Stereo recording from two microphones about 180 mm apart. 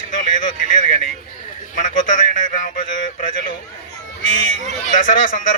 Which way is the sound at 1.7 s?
45° left (ahead or behind).